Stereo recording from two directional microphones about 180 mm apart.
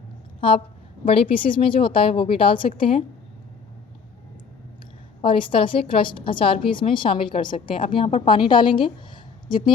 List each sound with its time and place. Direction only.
0.3 s a woman's voice: 30° left (ahead or behind)
5.2 s a woman's voice: 30° left (ahead or behind)